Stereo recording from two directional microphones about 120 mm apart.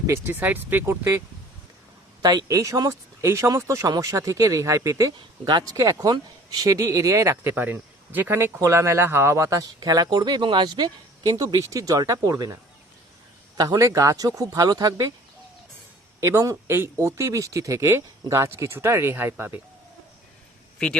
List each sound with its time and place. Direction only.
0.1 s speech: 15° right (ahead or behind)
2.2 s speech: 30° right (ahead or behind)
13.6 s speech: 30° right (ahead or behind)
16.2 s speech: 25° right (ahead or behind)